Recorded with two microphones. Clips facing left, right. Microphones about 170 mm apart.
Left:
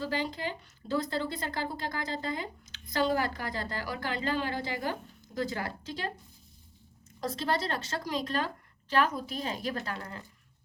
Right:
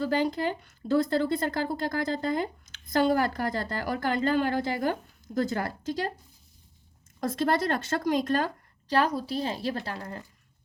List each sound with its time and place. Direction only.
0.0 s speech: 50° right (ahead or behind)
7.2 s speech: 50° right (ahead or behind)
8.9 s a woman's voice: 35° right (ahead or behind)